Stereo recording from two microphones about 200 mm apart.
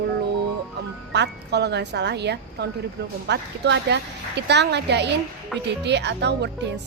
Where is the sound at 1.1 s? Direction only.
55° right (ahead or behind).